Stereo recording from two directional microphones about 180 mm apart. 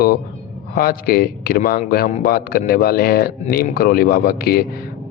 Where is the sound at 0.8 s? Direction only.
55° left (ahead or behind).